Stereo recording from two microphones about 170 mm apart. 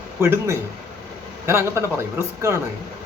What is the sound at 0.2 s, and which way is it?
Speech, 15° right (ahead or behind).